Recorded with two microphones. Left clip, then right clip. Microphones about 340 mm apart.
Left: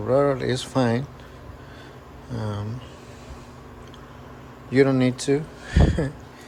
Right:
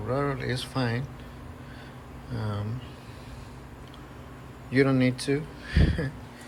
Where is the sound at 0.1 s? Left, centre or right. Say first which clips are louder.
Left 9 dB; centre.